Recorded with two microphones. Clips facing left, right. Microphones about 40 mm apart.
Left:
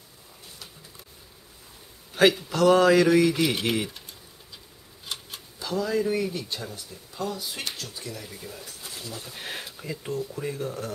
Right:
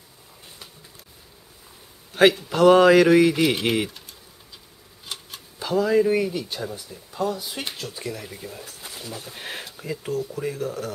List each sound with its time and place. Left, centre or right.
2.5 s mantra: right
3.3 s speech: centre
5.0 s a sound: centre
5.6 s mantra: right
6.3 s speech: centre
9.2 s speech: centre